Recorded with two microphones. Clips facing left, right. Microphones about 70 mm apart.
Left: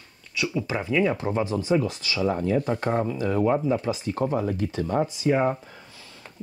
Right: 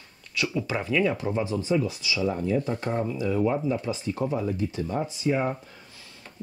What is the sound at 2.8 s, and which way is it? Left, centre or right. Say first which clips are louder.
Speech: left 3 dB; left.